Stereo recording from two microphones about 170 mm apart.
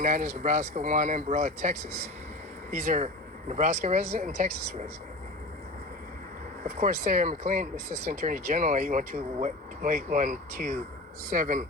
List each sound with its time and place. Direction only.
0.0 s speech: 55° right (ahead or behind)
6.7 s speech: 45° right (ahead or behind)